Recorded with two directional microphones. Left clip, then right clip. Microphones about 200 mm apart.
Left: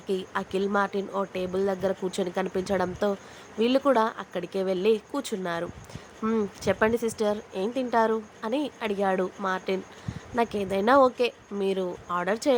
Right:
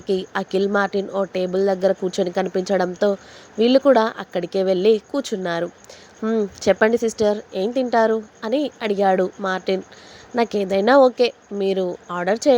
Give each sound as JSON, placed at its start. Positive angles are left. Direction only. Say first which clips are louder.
{"t": 0.1, "sound": "a woman's voice", "louder": "right 7 dB", "side_deg": -25}
{"t": 6.2, "sound": "speech", "louder": "right 6 dB", "side_deg": -10}
{"t": 6.7, "sound": "a woman's voice", "louder": "right 8 dB", "side_deg": -25}